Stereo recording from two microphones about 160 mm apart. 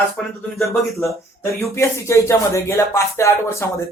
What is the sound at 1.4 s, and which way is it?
Speech, 15° left (ahead or behind).